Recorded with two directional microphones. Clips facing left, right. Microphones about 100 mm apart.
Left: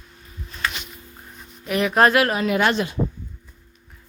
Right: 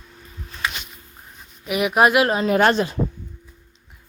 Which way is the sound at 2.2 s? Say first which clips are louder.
Right 3 dB; 30° right (ahead or behind).